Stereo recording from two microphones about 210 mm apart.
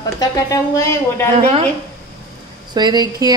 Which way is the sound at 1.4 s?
30° right (ahead or behind).